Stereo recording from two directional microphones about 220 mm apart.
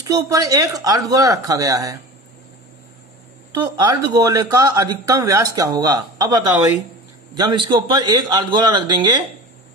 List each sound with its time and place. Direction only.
0.0 s speech: 15° right (ahead or behind)
3.8 s a man's voice: 20° right (ahead or behind)